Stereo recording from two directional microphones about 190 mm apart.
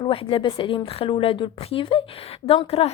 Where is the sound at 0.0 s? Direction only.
30° left (ahead or behind).